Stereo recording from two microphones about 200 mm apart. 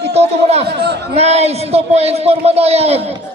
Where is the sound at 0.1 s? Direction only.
30° right (ahead or behind).